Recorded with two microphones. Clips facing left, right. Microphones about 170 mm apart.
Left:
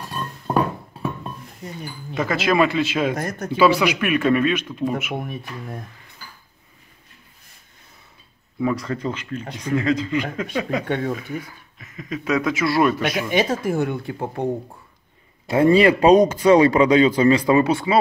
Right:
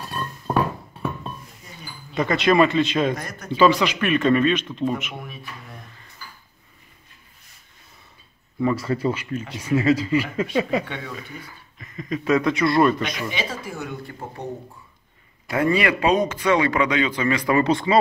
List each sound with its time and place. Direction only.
2.1 s speech: 5° left (ahead or behind)
3.2 s speech: 50° left (ahead or behind)
3.5 s speech: 10° left (ahead or behind)
5.1 s speech: 55° left (ahead or behind)
8.5 s speech: centre (ahead or behind)
10.9 s speech: 50° left (ahead or behind)
11.8 s speech: 5° left (ahead or behind)
13.3 s speech: 50° left (ahead or behind)
15.4 s speech: 30° left (ahead or behind)
17.6 s speech: 10° left (ahead or behind)